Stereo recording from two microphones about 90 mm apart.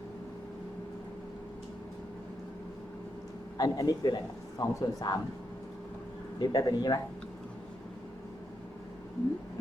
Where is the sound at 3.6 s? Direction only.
45° left (ahead or behind).